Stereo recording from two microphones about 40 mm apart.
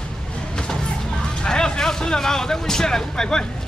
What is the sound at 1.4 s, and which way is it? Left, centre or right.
Speech, centre.